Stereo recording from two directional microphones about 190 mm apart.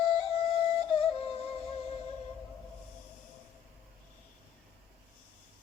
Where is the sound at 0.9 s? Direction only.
30° left (ahead or behind).